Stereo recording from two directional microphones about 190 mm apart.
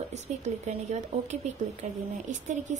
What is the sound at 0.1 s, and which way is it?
Speech, 40° right (ahead or behind).